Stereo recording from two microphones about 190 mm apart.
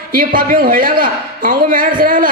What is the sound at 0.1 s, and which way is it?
Speech, 50° right (ahead or behind).